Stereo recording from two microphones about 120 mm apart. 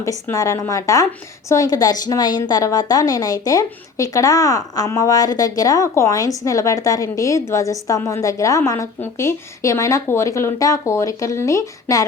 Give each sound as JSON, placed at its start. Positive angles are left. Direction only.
{"t": 0.0, "sound": "a woman's voice", "side_deg": 25}